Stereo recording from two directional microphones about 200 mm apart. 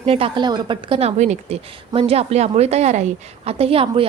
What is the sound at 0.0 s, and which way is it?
A woman's voice, 30° right (ahead or behind).